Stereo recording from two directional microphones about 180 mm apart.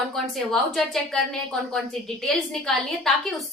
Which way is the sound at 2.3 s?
Centre (ahead or behind).